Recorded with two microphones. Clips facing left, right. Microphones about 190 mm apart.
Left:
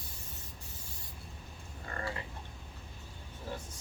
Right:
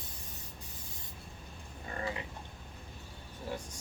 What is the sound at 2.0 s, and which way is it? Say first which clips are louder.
Frog: right 2 dB; 15° right (ahead or behind).